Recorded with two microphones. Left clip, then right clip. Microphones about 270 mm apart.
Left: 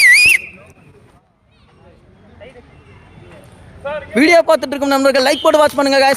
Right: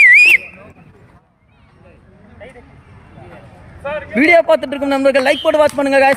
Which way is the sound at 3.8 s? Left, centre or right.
Right.